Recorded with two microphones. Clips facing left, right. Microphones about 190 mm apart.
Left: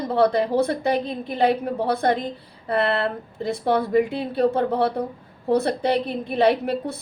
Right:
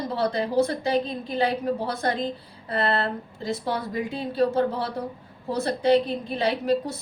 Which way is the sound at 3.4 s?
60° left (ahead or behind).